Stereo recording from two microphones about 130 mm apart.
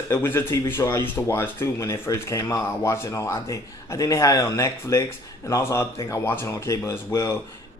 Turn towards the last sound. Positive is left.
turn(degrees=20)  # may be behind; listen again after turning